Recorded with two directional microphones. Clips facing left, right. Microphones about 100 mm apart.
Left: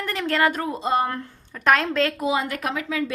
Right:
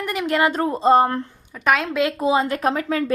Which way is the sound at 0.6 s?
35° right (ahead or behind).